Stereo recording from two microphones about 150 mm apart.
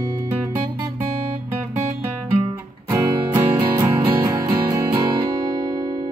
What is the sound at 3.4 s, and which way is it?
Music, 15° right (ahead or behind).